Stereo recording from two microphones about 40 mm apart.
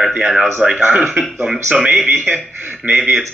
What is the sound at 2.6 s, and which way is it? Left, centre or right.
Speech, right.